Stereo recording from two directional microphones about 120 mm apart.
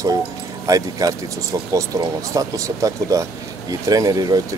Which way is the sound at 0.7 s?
30° right (ahead or behind).